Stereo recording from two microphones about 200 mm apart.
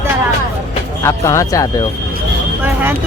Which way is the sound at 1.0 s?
15° left (ahead or behind).